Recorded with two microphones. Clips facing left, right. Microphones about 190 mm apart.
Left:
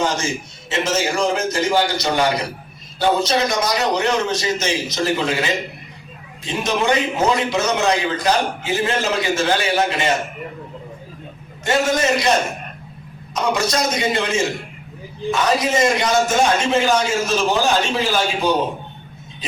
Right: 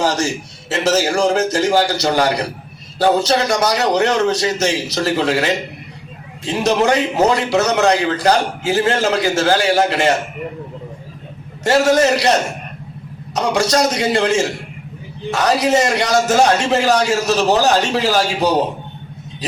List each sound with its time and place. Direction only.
0.0 s a man's voice: 75° right (ahead or behind)
11.6 s a man's voice: 75° right (ahead or behind)
13.3 s a man's voice: 75° right (ahead or behind)